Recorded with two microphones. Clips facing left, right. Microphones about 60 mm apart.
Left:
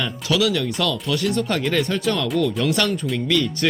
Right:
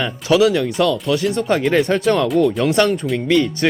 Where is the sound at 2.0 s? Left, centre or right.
Right.